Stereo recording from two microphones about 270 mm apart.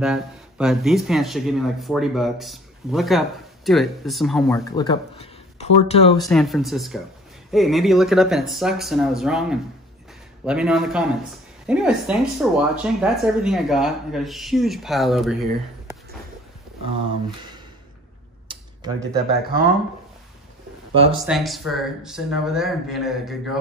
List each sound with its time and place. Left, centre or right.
0.0 s speech: centre
4.6 s speech: centre
6.2 s speech: centre
18.5 s a sound: centre
20.9 s speech: right
21.3 s speech: centre